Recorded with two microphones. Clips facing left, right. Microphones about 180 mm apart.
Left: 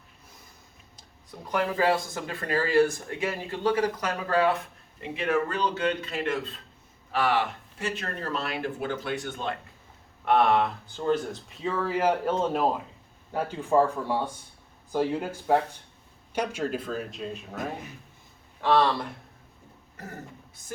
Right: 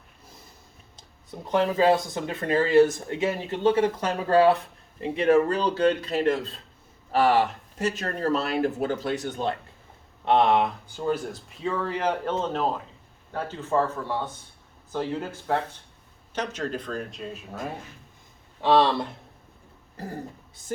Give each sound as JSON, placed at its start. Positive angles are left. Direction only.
{"t": 1.3, "sound": "speech", "side_deg": -25}
{"t": 10.2, "sound": "speech", "side_deg": -20}
{"t": 18.6, "sound": "speech", "side_deg": -20}